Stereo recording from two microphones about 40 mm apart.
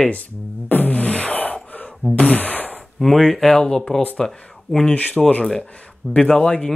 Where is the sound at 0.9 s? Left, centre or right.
Left.